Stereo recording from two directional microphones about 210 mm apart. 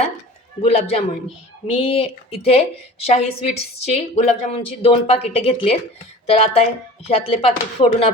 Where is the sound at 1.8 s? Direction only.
25° left (ahead or behind).